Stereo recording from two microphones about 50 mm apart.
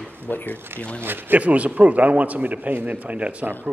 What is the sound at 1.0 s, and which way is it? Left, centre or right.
Speech, right.